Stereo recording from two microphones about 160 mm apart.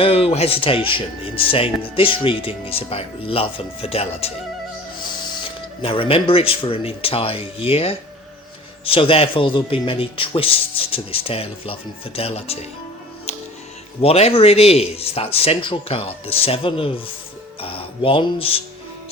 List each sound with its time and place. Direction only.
0.0 s speech: 35° left (ahead or behind)
5.8 s speech: 35° left (ahead or behind)
13.3 s music: 40° left (ahead or behind)
14.0 s speech: 40° left (ahead or behind)